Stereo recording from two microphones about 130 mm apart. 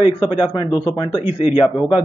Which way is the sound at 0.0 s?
35° left (ahead or behind).